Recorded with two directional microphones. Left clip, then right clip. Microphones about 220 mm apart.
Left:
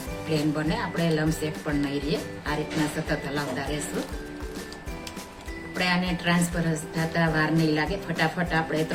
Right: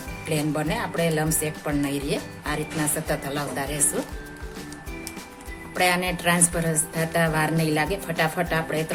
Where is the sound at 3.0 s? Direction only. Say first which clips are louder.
Right 1 dB; 50° right (ahead or behind).